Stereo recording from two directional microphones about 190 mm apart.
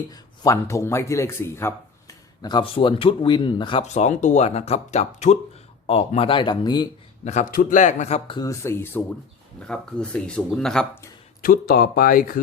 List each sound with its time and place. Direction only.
0.1 s a man's voice: 15° left (ahead or behind)
7.3 s a man's voice: 45° left (ahead or behind)
8.4 s speech: 15° left (ahead or behind)
11.4 s speech: 55° left (ahead or behind)